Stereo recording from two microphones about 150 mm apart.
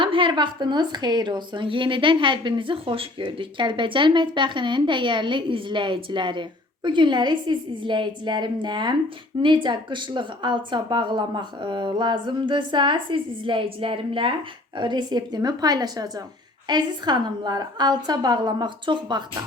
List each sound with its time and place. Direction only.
0.0 s a woman's voice: 35° right (ahead or behind)